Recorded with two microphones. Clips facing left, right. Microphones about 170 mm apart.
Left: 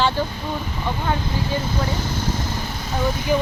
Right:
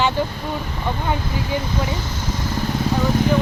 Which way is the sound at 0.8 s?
15° right (ahead or behind).